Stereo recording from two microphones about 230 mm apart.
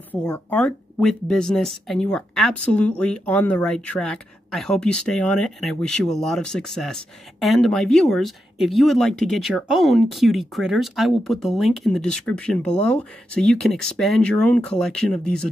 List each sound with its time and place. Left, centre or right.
0.1 s speech: centre